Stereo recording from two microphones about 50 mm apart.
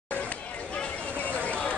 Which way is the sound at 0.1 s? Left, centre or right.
Left.